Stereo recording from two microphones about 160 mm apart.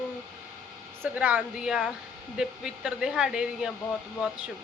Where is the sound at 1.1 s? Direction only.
10° right (ahead or behind).